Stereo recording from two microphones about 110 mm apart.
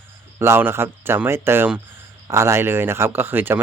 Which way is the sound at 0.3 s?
20° right (ahead or behind).